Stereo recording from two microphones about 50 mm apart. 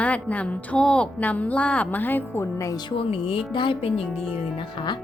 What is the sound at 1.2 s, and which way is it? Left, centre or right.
A woman's voice, left.